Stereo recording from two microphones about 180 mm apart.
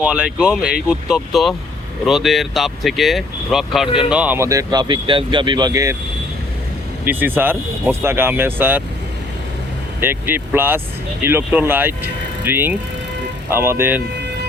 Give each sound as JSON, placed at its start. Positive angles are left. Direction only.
{"t": 0.0, "sound": "speech", "side_deg": -5}
{"t": 7.0, "sound": "speech", "side_deg": -10}
{"t": 10.0, "sound": "speech", "side_deg": -10}